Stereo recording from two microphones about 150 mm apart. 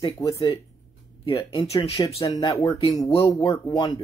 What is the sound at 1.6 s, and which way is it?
Speech, 40° left (ahead or behind).